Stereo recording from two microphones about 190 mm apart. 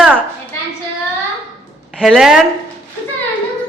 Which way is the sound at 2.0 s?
5° right (ahead or behind).